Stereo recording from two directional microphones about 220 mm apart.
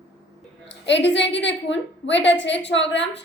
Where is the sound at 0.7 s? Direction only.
55° left (ahead or behind).